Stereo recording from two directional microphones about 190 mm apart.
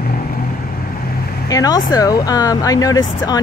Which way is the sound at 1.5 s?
20° left (ahead or behind).